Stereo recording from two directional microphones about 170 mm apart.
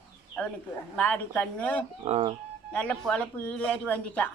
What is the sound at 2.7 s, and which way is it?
Speech, 10° left (ahead or behind).